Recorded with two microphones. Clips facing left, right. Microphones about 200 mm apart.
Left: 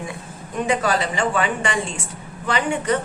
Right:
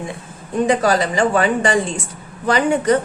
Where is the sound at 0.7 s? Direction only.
40° right (ahead or behind).